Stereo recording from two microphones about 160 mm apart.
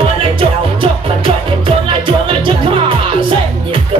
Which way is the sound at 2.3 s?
30° right (ahead or behind).